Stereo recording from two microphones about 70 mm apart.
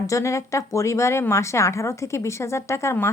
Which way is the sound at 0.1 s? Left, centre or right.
Left.